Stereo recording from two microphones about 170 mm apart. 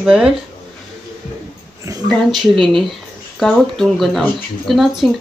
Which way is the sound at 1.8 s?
20° right (ahead or behind).